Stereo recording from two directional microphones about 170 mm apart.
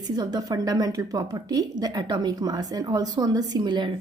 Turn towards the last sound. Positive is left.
turn(degrees=-25)  # may be behind; listen again after turning